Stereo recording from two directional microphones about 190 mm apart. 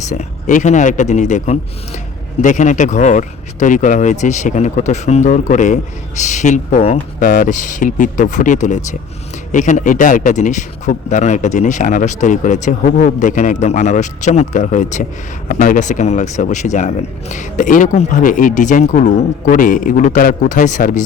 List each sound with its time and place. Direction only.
0.1 s speech: 40° left (ahead or behind)